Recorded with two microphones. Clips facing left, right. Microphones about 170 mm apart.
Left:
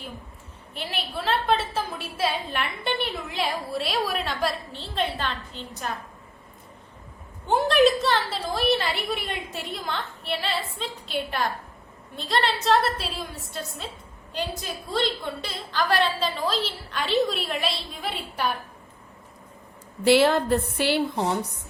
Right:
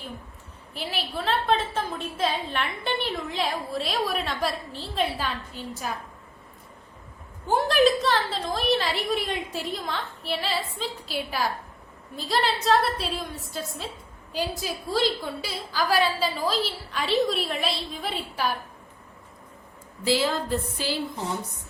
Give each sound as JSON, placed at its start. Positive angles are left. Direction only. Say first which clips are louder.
{"t": 0.7, "sound": "a woman's voice", "louder": "right 1 dB", "side_deg": 0}
{"t": 7.4, "sound": "a woman's voice", "louder": "left 1 dB", "side_deg": 0}
{"t": 20.1, "sound": "a woman's voice", "louder": "left 6 dB", "side_deg": 65}